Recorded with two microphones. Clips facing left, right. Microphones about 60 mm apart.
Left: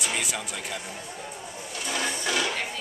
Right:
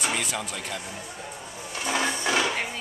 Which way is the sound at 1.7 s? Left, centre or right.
Right.